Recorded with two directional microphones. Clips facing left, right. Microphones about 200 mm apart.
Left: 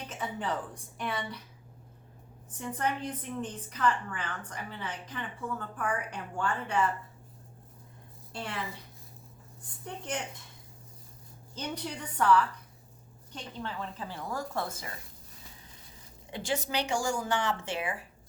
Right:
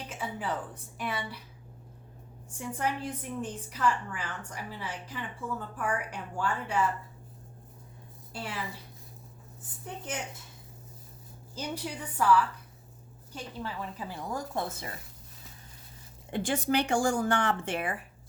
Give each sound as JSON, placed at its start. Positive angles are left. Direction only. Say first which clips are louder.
{"t": 0.1, "sound": "a woman's voice", "louder": "even", "side_deg": -5}
{"t": 2.5, "sound": "a woman's voice", "louder": "even", "side_deg": -10}
{"t": 8.3, "sound": "a woman's voice", "louder": "even", "side_deg": -5}
{"t": 9.8, "sound": "a woman's voice", "louder": "left 1 dB", "side_deg": -5}
{"t": 11.5, "sound": "a woman's voice", "louder": "right 1 dB", "side_deg": -10}
{"t": 16.3, "sound": "speech", "louder": "right 4 dB", "side_deg": -55}